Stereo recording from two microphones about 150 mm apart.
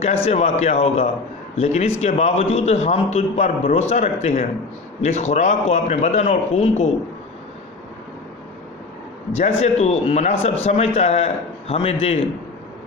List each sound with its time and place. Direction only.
0.0 s a man's voice: 40° left (ahead or behind)
9.6 s a man's voice: 45° left (ahead or behind)